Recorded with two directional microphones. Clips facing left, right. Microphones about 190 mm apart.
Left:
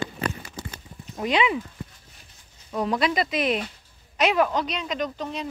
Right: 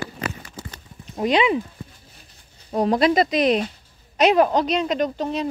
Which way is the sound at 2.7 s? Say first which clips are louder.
Right 6 dB; 40° right (ahead or behind).